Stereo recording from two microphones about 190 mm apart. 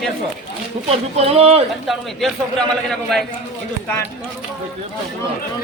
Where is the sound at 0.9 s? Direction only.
30° right (ahead or behind).